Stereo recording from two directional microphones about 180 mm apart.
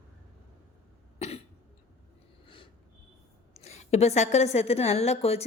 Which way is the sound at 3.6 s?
35° left (ahead or behind).